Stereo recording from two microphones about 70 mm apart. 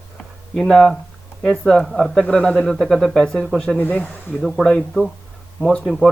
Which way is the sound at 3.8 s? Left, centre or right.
Left.